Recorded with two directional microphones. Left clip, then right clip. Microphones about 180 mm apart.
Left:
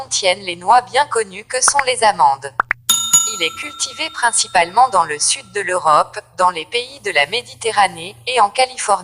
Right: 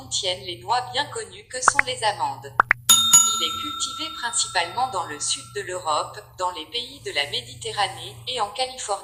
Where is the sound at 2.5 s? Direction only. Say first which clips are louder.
Even; centre (ahead or behind).